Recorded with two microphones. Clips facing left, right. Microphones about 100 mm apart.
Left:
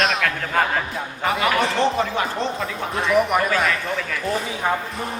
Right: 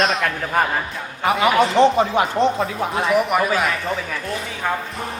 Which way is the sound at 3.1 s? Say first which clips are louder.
Left 1 dB; centre (ahead or behind).